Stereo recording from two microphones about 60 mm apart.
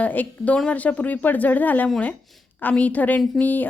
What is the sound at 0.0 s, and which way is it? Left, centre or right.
A woman's voice, left.